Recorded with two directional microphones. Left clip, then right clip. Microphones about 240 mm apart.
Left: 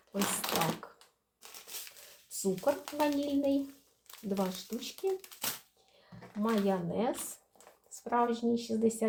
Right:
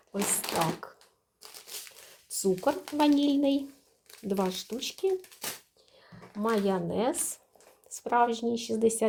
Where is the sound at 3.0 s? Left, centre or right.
Right.